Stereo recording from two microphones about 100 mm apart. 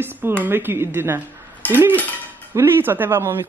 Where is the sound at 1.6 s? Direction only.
15° left (ahead or behind).